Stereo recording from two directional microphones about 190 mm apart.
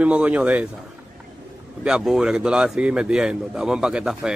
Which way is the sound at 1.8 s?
Centre (ahead or behind).